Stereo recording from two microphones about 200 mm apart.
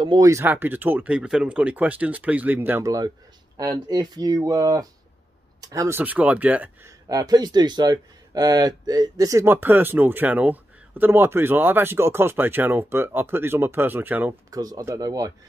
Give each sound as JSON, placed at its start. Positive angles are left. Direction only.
{"t": 0.0, "sound": "speech", "side_deg": -20}
{"t": 7.1, "sound": "speech", "side_deg": -20}